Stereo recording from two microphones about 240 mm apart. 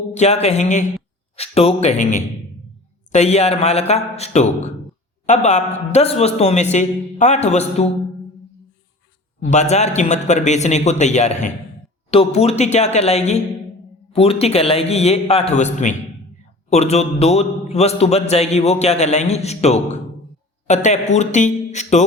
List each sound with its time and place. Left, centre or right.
0.1 s a man's voice: left
9.5 s a man's voice: left